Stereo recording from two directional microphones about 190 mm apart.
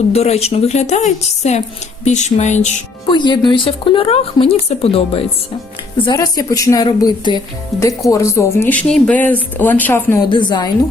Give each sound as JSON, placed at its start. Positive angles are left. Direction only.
{"t": 0.1, "sound": "a woman's voice", "side_deg": 35}
{"t": 3.1, "sound": "speech", "side_deg": 25}
{"t": 10.2, "sound": "speech", "side_deg": 25}